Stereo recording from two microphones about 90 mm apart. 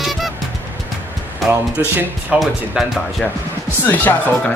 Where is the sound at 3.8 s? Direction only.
20° left (ahead or behind).